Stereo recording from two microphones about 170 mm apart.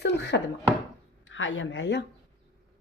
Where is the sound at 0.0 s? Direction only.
80° left.